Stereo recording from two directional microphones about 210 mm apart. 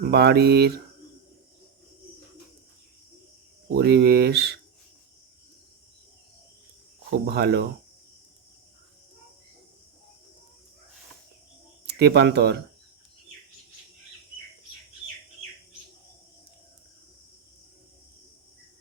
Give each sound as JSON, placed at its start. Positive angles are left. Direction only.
{"t": 0.0, "sound": "speech", "side_deg": -50}
{"t": 3.7, "sound": "speech", "side_deg": -50}
{"t": 7.1, "sound": "speech", "side_deg": -50}
{"t": 11.9, "sound": "speech", "side_deg": -50}